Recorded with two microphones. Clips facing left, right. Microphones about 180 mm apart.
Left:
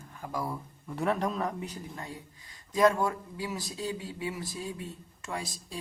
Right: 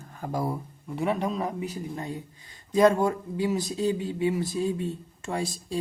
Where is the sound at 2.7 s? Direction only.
25° right (ahead or behind).